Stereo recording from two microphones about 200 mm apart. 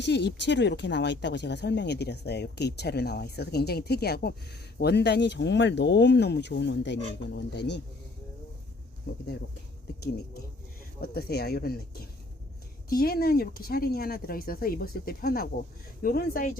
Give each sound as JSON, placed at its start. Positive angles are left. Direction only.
{"t": 0.0, "sound": "speech", "side_deg": 60}
{"t": 11.0, "sound": "speech", "side_deg": 50}